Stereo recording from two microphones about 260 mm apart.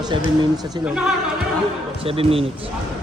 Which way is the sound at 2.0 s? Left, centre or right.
Right.